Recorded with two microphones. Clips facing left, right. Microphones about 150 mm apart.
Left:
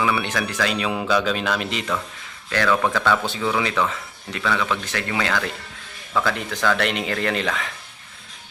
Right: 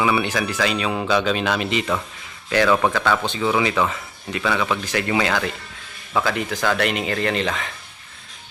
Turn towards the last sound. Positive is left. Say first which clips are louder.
# right 1 dB
turn(degrees=0)  # may be behind; listen again after turning